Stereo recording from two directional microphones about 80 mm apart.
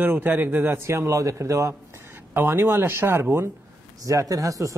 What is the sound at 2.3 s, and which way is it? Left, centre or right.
A man's voice, right.